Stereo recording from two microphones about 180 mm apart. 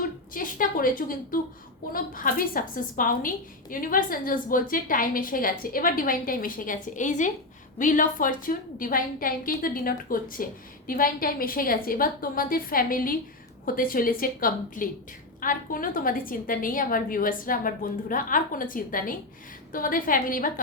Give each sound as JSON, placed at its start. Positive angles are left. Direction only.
{"t": 0.3, "sound": "a woman's voice", "side_deg": 50}